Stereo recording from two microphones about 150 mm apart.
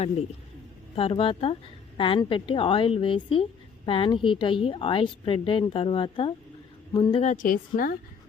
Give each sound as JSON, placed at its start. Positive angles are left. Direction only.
{"t": 0.9, "sound": "a woman's voice", "side_deg": 40}
{"t": 7.3, "sound": "a woman's voice", "side_deg": 65}